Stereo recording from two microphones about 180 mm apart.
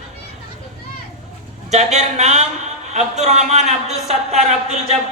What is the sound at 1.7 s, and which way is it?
A man's voice, 40° right (ahead or behind).